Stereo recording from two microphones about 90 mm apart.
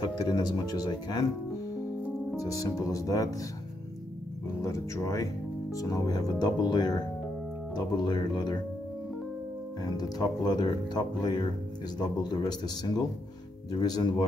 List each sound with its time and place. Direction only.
0.0 s speech: 55° left (ahead or behind)
2.3 s speech: 40° left (ahead or behind)
4.6 s speech: 35° left (ahead or behind); by 8.5 s 55° left (ahead or behind)
9.8 s speech: 45° left (ahead or behind)